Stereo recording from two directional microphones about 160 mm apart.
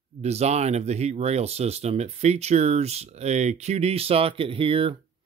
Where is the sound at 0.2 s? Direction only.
40° right (ahead or behind).